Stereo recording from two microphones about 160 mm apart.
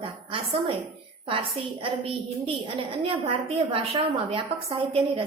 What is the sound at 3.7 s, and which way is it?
A woman's voice, 35° right (ahead or behind).